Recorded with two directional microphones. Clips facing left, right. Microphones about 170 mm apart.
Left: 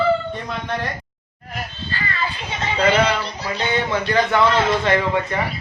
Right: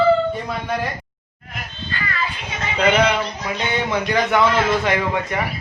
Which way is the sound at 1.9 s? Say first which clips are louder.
Right 1 dB; 30° left (ahead or behind).